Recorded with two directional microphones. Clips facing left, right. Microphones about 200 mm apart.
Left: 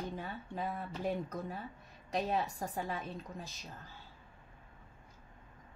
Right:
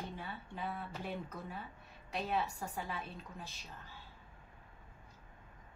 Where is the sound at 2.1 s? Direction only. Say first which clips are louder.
Left 3 dB; 40° left (ahead or behind).